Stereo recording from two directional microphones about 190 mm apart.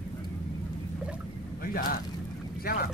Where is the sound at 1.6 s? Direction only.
50° left (ahead or behind).